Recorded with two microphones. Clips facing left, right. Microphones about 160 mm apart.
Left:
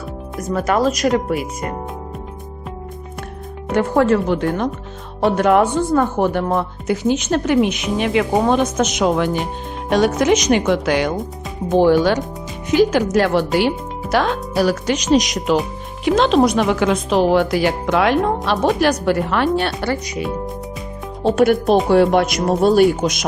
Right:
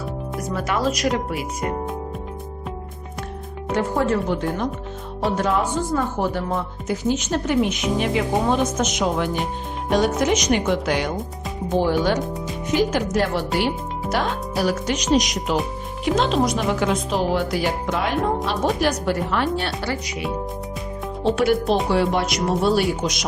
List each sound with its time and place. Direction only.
0.5 s speech: 45° left (ahead or behind)
3.7 s speech: 70° left (ahead or behind); by 11.1 s 90° left
12.7 s a woman's voice: 90° left
18.4 s speech: 70° left (ahead or behind); by 20.1 s 55° left (ahead or behind)
21.2 s speech: 45° left (ahead or behind)